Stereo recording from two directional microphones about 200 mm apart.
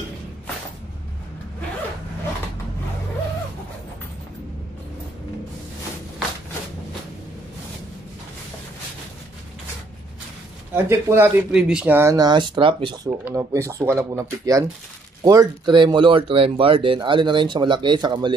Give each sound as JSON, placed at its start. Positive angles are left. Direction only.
{"t": 10.7, "sound": "speech", "side_deg": -10}
{"t": 13.2, "sound": "speech", "side_deg": -15}